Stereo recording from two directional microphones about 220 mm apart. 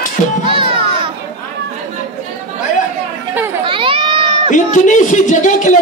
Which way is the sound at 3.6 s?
25° right (ahead or behind).